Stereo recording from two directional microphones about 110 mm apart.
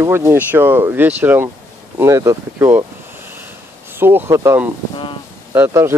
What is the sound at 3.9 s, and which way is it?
Speech, 20° right (ahead or behind).